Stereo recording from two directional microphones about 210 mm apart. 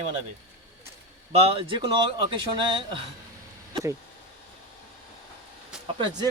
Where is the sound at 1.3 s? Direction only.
25° right (ahead or behind).